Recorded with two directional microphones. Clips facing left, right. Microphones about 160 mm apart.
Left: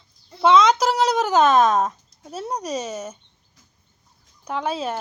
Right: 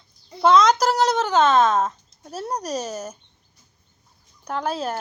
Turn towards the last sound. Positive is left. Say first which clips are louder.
# even
turn(degrees=5)  # may be behind; listen again after turning